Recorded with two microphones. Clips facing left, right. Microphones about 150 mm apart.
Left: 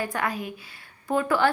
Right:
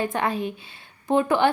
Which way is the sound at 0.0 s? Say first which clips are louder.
Right 4 dB; 25° right (ahead or behind).